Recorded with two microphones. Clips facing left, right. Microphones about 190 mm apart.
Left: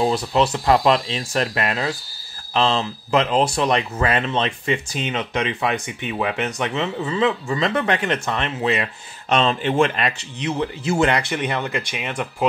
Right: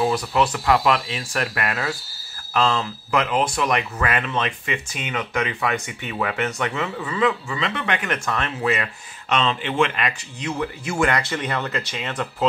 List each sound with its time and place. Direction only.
0.1 s speech: 25° left (ahead or behind)
7.4 s speech: 40° left (ahead or behind); by 8.8 s 20° left (ahead or behind)
9.3 s speech: 40° left (ahead or behind)
10.4 s speech: 25° left (ahead or behind)